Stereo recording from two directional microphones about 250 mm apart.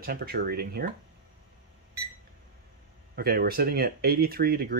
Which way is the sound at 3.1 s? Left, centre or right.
Right.